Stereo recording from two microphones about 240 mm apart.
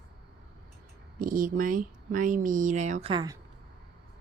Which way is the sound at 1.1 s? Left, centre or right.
Right.